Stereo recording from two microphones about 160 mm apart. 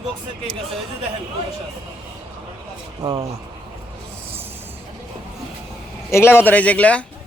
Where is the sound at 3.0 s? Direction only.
25° right (ahead or behind).